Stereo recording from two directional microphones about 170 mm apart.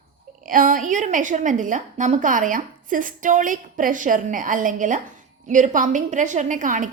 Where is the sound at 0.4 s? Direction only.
50° right (ahead or behind).